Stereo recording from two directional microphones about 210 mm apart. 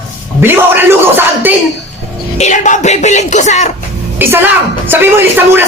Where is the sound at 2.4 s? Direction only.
35° left (ahead or behind).